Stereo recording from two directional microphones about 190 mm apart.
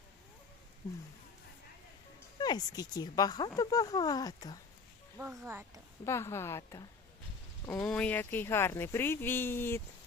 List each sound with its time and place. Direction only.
2.4 s speech: 20° left (ahead or behind)
5.1 s speech: 10° right (ahead or behind)
6.1 s speech: 15° left (ahead or behind)